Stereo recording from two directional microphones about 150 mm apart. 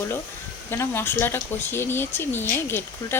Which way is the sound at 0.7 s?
15° left (ahead or behind).